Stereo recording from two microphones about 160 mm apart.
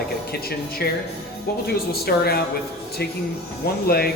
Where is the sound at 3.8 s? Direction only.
75° left (ahead or behind).